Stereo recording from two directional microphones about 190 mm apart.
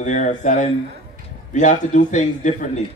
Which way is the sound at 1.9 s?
40° left (ahead or behind).